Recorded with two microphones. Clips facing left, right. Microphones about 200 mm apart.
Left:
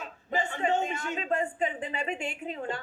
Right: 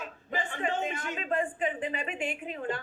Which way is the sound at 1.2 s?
25° left (ahead or behind).